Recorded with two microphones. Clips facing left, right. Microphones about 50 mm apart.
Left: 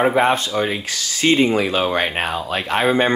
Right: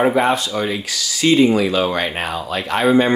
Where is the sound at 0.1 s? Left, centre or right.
Left.